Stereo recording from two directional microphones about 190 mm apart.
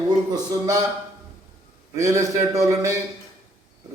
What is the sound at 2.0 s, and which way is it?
Speech, 15° right (ahead or behind).